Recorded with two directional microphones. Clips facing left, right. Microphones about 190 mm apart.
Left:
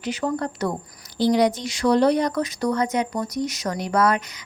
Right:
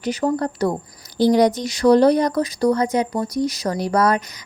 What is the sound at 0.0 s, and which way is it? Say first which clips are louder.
Speech: right 4 dB; 40° right (ahead or behind).